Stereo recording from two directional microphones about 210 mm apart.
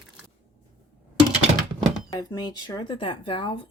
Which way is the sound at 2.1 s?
20° left (ahead or behind).